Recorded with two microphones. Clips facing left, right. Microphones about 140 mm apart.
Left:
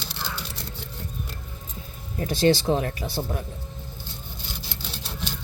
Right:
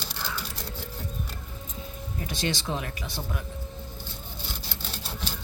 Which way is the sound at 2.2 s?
40° left (ahead or behind).